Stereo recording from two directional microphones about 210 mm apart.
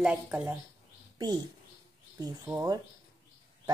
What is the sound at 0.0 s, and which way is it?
Speech, 5° right (ahead or behind).